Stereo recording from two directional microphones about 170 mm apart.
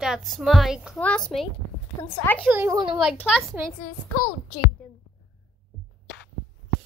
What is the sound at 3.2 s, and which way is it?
Speech, centre (ahead or behind).